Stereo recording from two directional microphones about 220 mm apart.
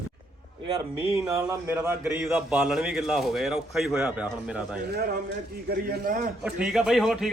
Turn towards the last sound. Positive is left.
turn(degrees=0)  # may be behind; listen again after turning